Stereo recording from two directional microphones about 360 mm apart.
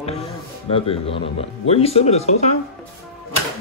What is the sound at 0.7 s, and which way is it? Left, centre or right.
Speech, centre.